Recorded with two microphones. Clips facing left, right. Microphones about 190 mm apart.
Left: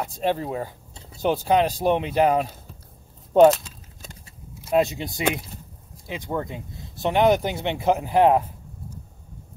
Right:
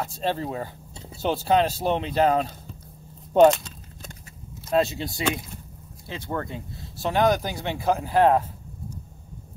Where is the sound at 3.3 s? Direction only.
5° left (ahead or behind).